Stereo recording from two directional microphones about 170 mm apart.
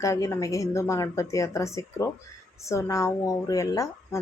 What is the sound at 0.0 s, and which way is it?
A woman's voice, 20° left (ahead or behind).